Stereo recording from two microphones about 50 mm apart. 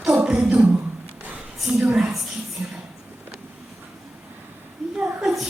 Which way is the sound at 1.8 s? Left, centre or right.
Centre.